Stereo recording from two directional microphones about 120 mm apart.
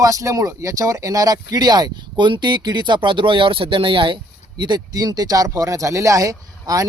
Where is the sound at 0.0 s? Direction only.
25° right (ahead or behind).